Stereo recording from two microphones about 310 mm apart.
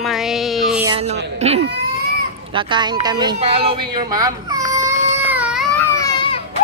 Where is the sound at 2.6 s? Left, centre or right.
Centre.